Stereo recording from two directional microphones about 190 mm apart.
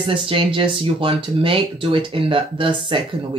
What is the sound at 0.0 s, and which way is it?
Speech, 25° right (ahead or behind).